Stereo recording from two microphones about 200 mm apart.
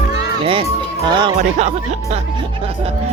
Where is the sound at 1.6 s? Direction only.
35° right (ahead or behind).